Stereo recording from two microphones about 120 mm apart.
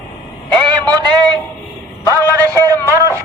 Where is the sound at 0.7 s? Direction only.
35° right (ahead or behind).